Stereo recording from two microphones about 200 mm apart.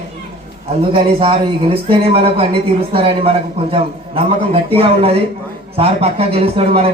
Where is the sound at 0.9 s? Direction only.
25° right (ahead or behind).